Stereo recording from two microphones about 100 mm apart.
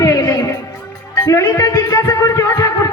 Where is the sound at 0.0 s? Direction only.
35° left (ahead or behind).